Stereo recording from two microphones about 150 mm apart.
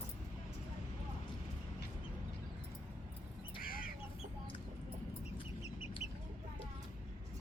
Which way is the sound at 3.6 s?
75° left (ahead or behind).